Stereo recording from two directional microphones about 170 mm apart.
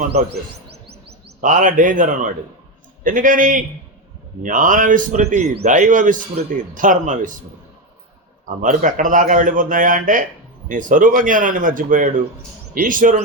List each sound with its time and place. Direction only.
1.4 s a man's voice: 50° right (ahead or behind)
8.4 s a man's voice: 50° right (ahead or behind)